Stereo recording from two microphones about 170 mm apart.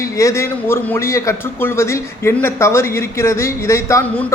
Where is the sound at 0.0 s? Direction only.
15° left (ahead or behind).